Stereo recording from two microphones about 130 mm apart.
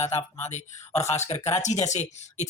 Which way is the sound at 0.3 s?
60° left (ahead or behind).